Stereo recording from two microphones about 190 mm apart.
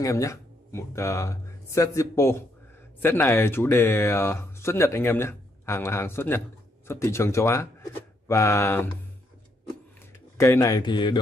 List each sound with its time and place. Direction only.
0.0 s speech: 15° left (ahead or behind)
10.3 s a man's voice: 15° left (ahead or behind)